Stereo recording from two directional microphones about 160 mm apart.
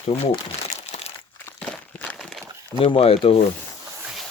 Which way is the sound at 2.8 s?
35° left (ahead or behind).